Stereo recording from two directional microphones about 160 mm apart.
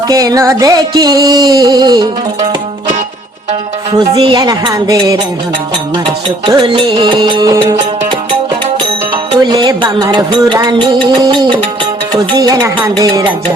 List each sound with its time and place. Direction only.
0.1 s music: 20° right (ahead or behind)
3.9 s music: 30° right (ahead or behind)
6.5 s music: 30° right (ahead or behind)
9.1 s music: 25° right (ahead or behind)